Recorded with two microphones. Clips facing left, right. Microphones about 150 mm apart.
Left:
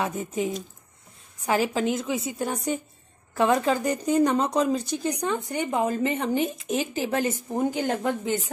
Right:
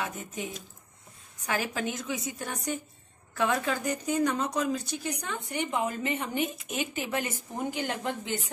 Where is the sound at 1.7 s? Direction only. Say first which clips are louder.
Left 7 dB; 25° left (ahead or behind).